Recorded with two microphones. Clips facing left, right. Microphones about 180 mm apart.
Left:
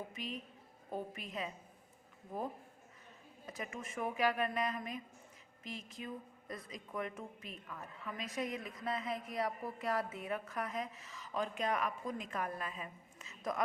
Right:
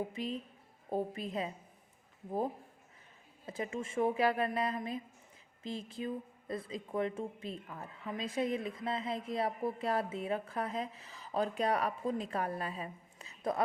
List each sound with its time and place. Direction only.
0.1 s a woman's voice: 30° right (ahead or behind)
3.4 s a woman's voice: 30° right (ahead or behind)